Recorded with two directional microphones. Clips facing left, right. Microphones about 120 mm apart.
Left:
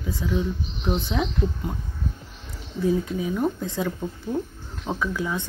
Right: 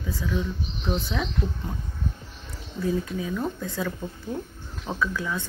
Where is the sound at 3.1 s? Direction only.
15° left (ahead or behind).